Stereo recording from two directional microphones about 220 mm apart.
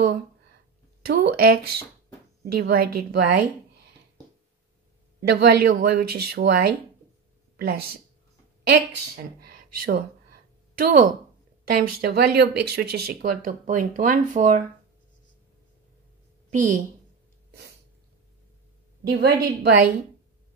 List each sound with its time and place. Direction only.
1.0 s speech: 45° right (ahead or behind)
5.2 s speech: 45° right (ahead or behind)
11.6 s speech: 45° right (ahead or behind)
16.4 s a woman's voice: 35° right (ahead or behind)
19.0 s speech: 45° right (ahead or behind)